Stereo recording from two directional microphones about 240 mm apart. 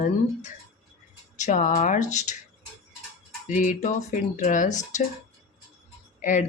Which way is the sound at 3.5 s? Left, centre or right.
Left.